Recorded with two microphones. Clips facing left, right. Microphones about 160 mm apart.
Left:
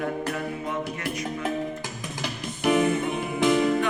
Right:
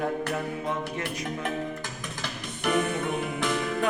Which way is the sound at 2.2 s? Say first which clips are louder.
Left 5 dB; 10° left (ahead or behind).